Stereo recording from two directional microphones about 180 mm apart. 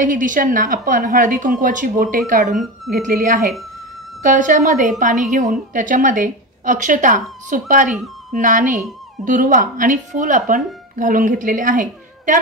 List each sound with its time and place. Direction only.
0.0 s speech: 45° right (ahead or behind)
2.5 s speech: centre (ahead or behind)
2.9 s speech: 50° right (ahead or behind)